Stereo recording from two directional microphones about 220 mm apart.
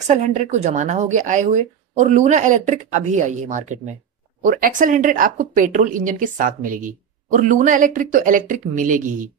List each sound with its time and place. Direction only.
0.0 s speech: 35° right (ahead or behind)